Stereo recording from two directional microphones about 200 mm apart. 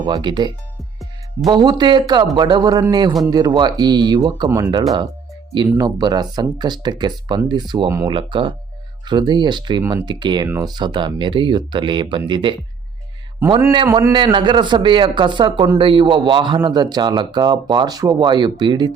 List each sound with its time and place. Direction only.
0.0 s a man's voice: 20° right (ahead or behind)
13.8 s a man's voice: 20° right (ahead or behind)